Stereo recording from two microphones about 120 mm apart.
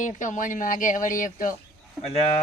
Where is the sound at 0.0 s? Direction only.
90° left.